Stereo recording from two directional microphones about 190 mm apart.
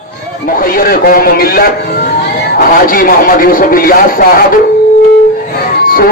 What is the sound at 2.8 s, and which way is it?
Speech, 50° left (ahead or behind).